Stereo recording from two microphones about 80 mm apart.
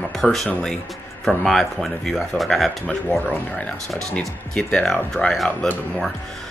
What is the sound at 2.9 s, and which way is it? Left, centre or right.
Speech, centre.